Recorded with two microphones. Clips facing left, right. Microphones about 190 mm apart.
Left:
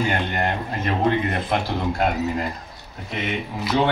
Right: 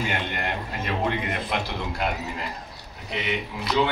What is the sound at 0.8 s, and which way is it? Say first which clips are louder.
Speech: left 6 dB; 50° left (ahead or behind).